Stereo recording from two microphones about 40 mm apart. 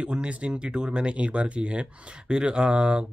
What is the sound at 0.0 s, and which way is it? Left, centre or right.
Speech, right.